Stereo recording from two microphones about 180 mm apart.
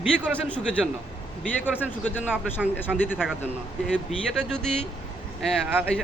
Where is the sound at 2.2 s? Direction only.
5° right (ahead or behind).